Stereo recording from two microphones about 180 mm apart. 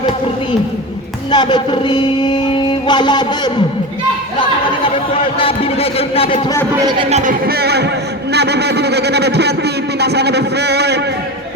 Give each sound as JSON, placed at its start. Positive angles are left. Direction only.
{"t": 1.3, "sound": "music", "side_deg": 25}
{"t": 5.2, "sound": "speech", "side_deg": 30}
{"t": 7.1, "sound": "a man's voice", "side_deg": -45}